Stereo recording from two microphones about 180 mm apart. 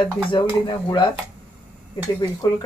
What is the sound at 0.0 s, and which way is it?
Speech, 25° left (ahead or behind).